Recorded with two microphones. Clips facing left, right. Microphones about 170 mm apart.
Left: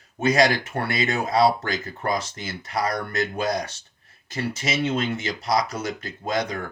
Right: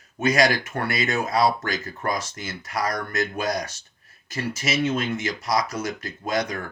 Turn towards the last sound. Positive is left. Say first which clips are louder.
# even
turn(degrees=30)  # may be behind; listen again after turning